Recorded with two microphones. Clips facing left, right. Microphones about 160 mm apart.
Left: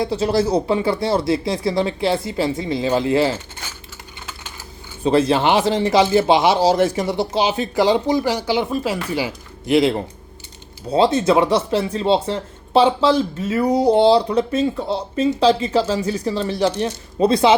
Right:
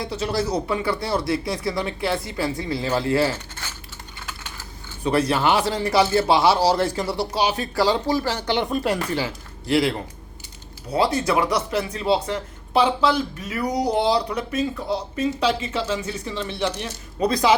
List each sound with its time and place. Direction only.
0.0 s speech: 30° left (ahead or behind)
5.0 s speech: 25° left (ahead or behind)